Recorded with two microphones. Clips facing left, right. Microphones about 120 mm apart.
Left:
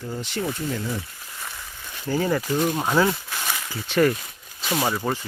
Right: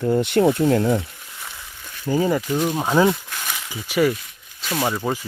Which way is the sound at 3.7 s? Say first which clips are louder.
Right 1 dB; 10° right (ahead or behind).